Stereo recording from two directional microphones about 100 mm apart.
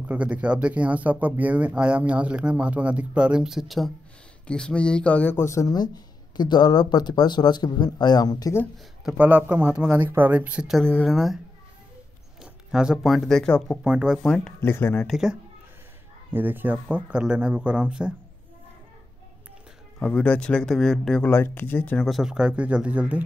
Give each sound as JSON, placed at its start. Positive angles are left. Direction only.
{"t": 0.1, "sound": "speech", "side_deg": -15}
{"t": 5.4, "sound": "speech", "side_deg": 30}
{"t": 9.1, "sound": "speech", "side_deg": -15}
{"t": 10.8, "sound": "speech", "side_deg": 10}
{"t": 11.1, "sound": "speech", "side_deg": 0}
{"t": 12.7, "sound": "speech", "side_deg": -5}
{"t": 13.8, "sound": "speech", "side_deg": -10}
{"t": 14.2, "sound": "speech", "side_deg": 10}
{"t": 14.6, "sound": "speech", "side_deg": 20}
{"t": 15.0, "sound": "speech", "side_deg": -5}
{"t": 16.3, "sound": "speech", "side_deg": -20}
{"t": 20.0, "sound": "speech", "side_deg": 15}
{"t": 21.3, "sound": "speech", "side_deg": 20}
{"t": 21.9, "sound": "speech", "side_deg": 0}